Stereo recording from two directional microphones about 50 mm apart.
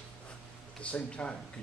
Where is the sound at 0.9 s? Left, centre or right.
Left.